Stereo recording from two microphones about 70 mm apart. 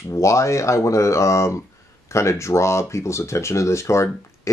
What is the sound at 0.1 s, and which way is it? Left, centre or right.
Speech, left.